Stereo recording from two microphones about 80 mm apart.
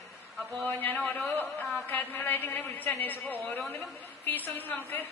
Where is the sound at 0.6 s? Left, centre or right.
Left.